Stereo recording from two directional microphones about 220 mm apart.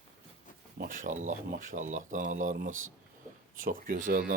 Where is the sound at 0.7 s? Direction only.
40° right (ahead or behind).